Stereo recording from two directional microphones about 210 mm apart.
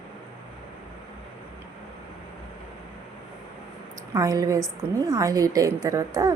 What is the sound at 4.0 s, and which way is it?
A woman's voice, 15° right (ahead or behind).